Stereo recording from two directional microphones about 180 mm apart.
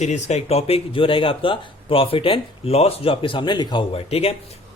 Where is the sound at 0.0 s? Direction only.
40° left (ahead or behind).